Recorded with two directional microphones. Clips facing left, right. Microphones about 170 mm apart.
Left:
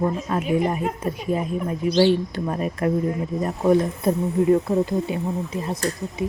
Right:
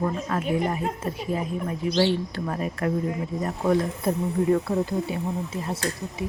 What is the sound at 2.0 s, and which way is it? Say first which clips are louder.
Speech: left 5 dB; 20° left (ahead or behind).